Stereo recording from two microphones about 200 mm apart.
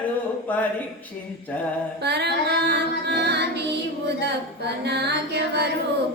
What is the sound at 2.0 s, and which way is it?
Female singing, 55° right (ahead or behind).